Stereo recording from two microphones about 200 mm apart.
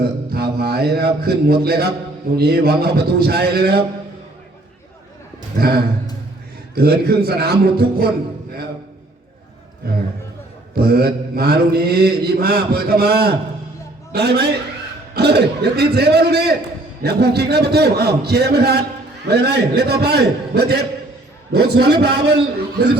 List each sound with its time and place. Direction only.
0.0 s a man's voice: 50° right (ahead or behind)
5.5 s a man's voice: 50° right (ahead or behind)
9.8 s a man's voice: 50° right (ahead or behind)